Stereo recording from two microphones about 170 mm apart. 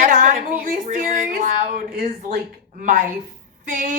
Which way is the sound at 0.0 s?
50° right (ahead or behind).